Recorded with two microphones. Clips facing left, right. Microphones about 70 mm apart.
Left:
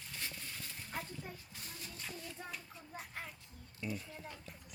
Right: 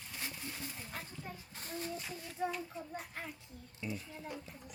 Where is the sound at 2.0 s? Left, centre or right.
Centre.